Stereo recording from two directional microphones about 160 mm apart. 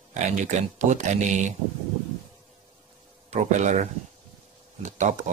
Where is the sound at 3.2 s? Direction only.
50° right (ahead or behind).